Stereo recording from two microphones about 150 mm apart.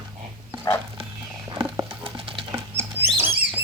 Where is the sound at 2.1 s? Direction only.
35° right (ahead or behind).